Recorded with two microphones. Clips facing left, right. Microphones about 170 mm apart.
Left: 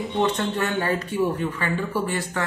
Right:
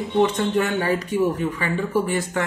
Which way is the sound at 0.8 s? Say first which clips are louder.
Right 2 dB; 15° right (ahead or behind).